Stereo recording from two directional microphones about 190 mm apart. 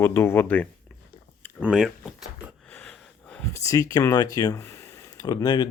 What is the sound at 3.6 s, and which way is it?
Speech, 15° left (ahead or behind).